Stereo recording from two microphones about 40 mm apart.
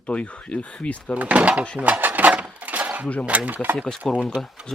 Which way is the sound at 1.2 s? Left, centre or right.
Right.